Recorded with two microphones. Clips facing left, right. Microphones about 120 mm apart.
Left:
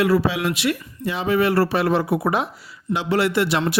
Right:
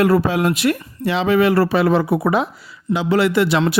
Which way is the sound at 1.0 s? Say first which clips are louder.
Right 5 dB; 85° right.